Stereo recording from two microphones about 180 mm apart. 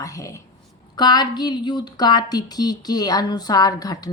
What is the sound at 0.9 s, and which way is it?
A woman's voice, 25° left (ahead or behind).